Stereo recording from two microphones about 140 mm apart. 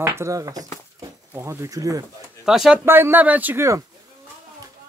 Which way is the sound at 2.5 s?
5° right (ahead or behind).